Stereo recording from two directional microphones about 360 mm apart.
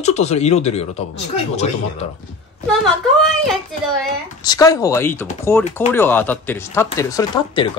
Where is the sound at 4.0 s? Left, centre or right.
Centre.